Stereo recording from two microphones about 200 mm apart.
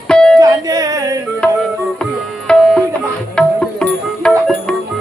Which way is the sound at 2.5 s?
5° left (ahead or behind).